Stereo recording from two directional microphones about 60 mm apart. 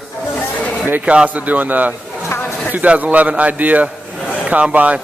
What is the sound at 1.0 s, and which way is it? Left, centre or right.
A man's voice, centre.